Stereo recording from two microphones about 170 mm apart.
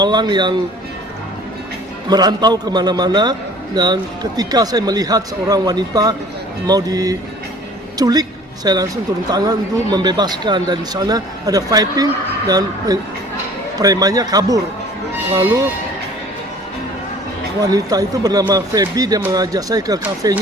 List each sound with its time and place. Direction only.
0.0 s speech: 25° right (ahead or behind)
2.0 s a woman's voice: 25° right (ahead or behind)
17.6 s speech: 20° right (ahead or behind)